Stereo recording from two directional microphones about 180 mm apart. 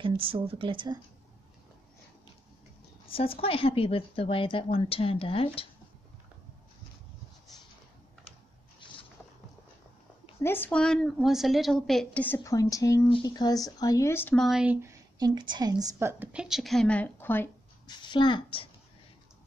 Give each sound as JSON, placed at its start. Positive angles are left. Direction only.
{"t": 0.0, "sound": "speech", "side_deg": -30}
{"t": 3.1, "sound": "a woman's voice", "side_deg": 30}
{"t": 10.4, "sound": "speech", "side_deg": 10}
{"t": 17.8, "sound": "a woman's voice", "side_deg": 25}